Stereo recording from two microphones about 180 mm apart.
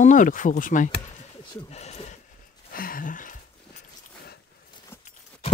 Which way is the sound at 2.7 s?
50° left (ahead or behind).